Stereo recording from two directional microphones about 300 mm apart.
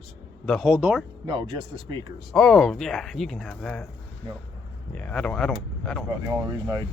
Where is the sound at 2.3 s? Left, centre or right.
Centre.